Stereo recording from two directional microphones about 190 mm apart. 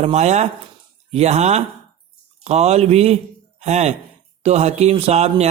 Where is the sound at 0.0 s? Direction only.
35° right (ahead or behind).